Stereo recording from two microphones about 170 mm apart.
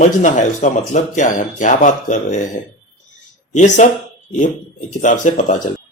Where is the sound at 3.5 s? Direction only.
45° left (ahead or behind).